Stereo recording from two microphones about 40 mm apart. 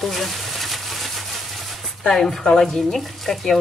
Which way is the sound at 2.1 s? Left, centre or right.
Centre.